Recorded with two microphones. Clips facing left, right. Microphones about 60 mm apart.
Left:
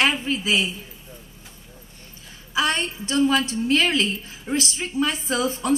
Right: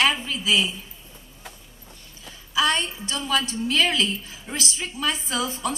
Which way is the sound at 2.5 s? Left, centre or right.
Left.